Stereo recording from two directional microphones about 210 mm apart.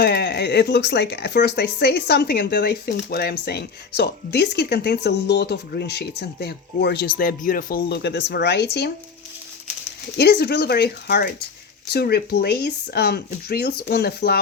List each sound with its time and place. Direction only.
0.0 s speech: 50° left (ahead or behind)
10.2 s speech: 50° left (ahead or behind)